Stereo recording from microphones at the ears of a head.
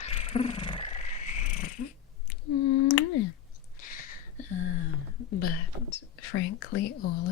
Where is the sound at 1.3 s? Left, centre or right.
Left.